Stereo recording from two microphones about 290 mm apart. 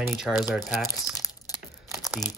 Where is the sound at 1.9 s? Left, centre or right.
Centre.